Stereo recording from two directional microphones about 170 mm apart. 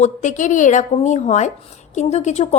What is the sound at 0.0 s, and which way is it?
A woman's voice, 45° left (ahead or behind).